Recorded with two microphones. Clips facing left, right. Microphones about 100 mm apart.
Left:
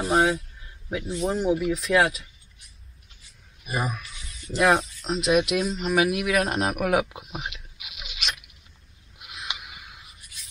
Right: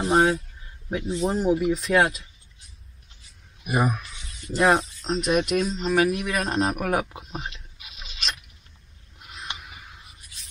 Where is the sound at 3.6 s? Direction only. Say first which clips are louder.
Right 5 dB; 20° right (ahead or behind).